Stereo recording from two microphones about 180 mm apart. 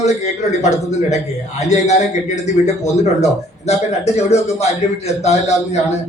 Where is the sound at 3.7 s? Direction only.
40° left (ahead or behind).